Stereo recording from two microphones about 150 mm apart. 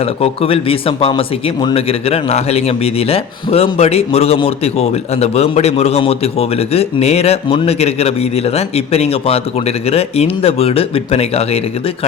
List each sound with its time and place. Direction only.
0.0 s speech: 40° left (ahead or behind)